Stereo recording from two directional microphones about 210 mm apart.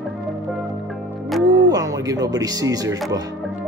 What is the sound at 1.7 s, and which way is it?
Speech, 15° right (ahead or behind).